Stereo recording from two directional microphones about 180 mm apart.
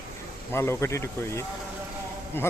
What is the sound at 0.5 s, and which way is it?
Speech, 15° left (ahead or behind).